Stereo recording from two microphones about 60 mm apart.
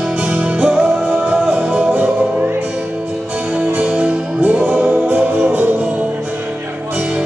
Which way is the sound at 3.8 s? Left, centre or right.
Right.